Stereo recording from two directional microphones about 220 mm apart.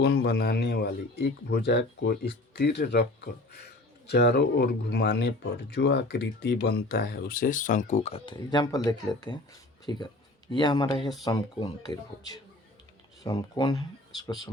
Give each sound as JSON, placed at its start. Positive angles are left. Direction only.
{"t": 0.0, "sound": "speech", "side_deg": 45}
{"t": 4.1, "sound": "speech", "side_deg": 45}